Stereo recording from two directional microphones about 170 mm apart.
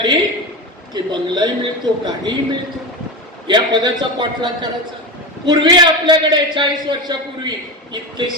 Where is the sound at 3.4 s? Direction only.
25° right (ahead or behind).